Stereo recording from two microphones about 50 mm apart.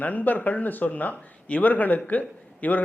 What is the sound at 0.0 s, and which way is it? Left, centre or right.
Speech, left.